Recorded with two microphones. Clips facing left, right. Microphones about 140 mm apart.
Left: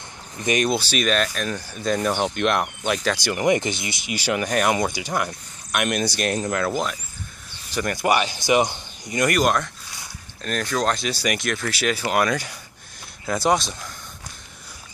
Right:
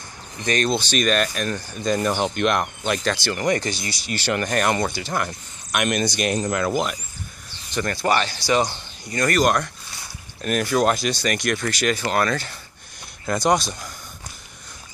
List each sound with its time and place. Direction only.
0.5 s speech: 10° left (ahead or behind)
3.3 s speech: 15° left (ahead or behind); by 7.0 s 5° right (ahead or behind)
7.7 s speech: 10° left (ahead or behind)
9.4 s speech: centre (ahead or behind)
11.1 s speech: 5° left (ahead or behind)